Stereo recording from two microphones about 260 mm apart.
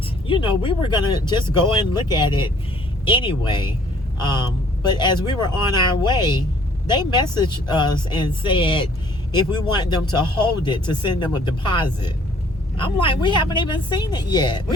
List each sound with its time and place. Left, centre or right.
0.3 s speech: centre